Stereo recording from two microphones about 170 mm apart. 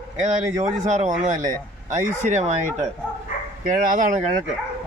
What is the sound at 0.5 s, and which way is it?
Speech, 45° right (ahead or behind).